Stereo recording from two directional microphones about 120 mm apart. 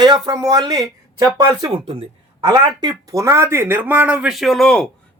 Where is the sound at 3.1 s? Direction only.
25° right (ahead or behind); by 4.9 s 5° left (ahead or behind).